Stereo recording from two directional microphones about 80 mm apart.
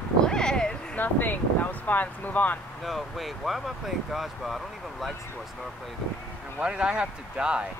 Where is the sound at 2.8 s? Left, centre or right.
Centre.